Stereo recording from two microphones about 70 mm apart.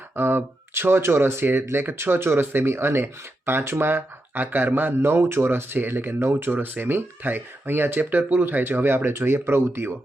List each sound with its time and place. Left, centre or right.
0.2 s speech: right